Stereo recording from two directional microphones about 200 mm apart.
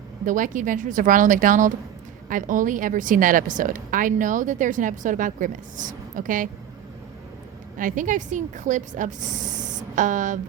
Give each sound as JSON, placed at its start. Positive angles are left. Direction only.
{"t": 0.3, "sound": "a woman's voice", "side_deg": -40}
{"t": 7.8, "sound": "a woman's voice", "side_deg": -40}